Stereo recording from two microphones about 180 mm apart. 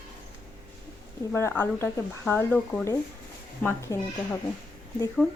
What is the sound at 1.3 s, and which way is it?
Speech, 15° left (ahead or behind).